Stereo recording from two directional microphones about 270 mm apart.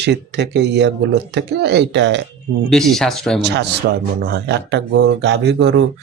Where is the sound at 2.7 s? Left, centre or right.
Centre.